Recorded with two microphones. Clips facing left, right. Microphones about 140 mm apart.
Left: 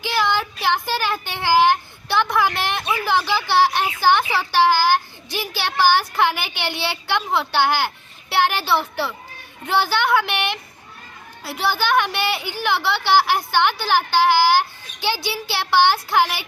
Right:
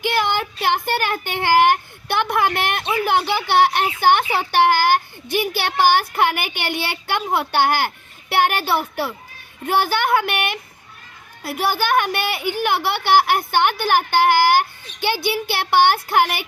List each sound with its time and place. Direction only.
0.0 s a sound: 55° right (ahead or behind)
0.9 s a woman's voice: 55° right (ahead or behind)
2.8 s speech: 25° right (ahead or behind)
3.1 s a child's voice: 55° right (ahead or behind)